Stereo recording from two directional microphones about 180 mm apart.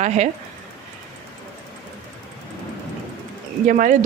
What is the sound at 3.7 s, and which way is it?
Speech, 45° right (ahead or behind).